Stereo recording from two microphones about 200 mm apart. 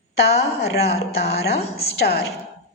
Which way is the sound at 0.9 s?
55° left (ahead or behind).